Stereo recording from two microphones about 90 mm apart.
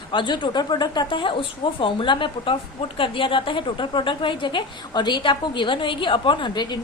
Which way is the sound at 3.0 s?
75° left (ahead or behind).